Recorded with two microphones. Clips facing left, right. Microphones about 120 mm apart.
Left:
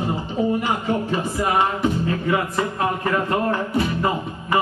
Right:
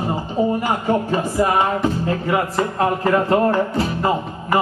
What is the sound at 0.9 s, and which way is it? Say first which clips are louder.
Speech: right 3 dB; 40° right (ahead or behind).